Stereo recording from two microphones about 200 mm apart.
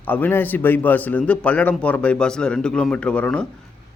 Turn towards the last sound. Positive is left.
turn(degrees=5)  # may be behind; listen again after turning